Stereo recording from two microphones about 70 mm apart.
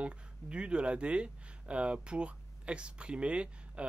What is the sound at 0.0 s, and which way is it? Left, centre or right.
Speech, centre.